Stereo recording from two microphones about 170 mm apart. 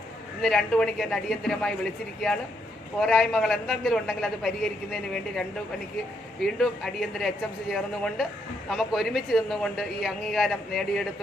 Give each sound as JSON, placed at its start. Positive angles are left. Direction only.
{"t": 0.4, "sound": "a man's voice", "side_deg": 5}